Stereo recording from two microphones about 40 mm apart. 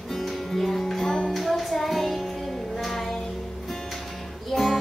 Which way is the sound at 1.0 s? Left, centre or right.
Centre.